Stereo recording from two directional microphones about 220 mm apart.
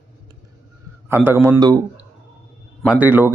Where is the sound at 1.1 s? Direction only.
10° right (ahead or behind).